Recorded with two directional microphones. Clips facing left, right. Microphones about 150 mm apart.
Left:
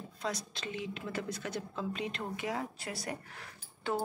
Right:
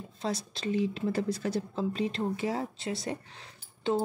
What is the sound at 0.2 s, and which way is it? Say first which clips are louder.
Speech: right 5 dB; 30° right (ahead or behind).